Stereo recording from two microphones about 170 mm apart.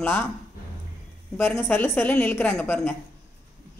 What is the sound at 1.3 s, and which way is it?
Speech, 15° left (ahead or behind).